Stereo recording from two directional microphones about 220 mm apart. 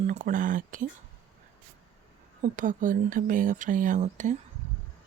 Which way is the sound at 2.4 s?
35° right (ahead or behind).